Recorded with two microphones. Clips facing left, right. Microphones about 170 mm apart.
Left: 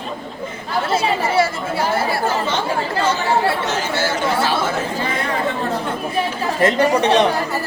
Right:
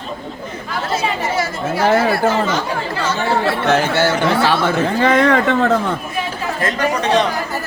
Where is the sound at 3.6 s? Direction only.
60° right (ahead or behind); by 5.7 s 75° right (ahead or behind).